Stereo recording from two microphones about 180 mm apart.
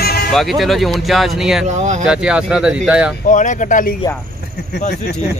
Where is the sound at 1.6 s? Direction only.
40° right (ahead or behind).